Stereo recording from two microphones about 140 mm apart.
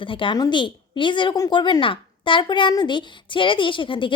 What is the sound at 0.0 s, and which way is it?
A woman's voice, 35° left (ahead or behind).